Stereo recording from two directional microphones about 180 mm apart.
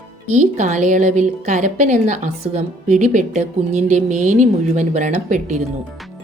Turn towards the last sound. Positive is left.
turn(degrees=-45)  # may be behind; listen again after turning